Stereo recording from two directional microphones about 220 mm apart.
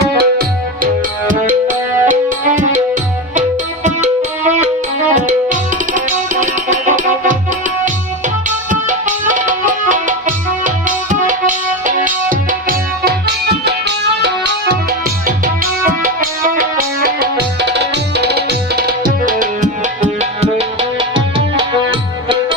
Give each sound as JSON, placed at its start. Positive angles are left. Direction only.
{"t": 0.0, "sound": "music", "side_deg": -45}
{"t": 8.4, "sound": "music", "side_deg": -35}
{"t": 15.9, "sound": "music", "side_deg": -40}
{"t": 20.4, "sound": "music", "side_deg": -25}